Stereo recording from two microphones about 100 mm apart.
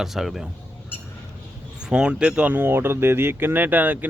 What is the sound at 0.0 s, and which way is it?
Speech, 5° right (ahead or behind).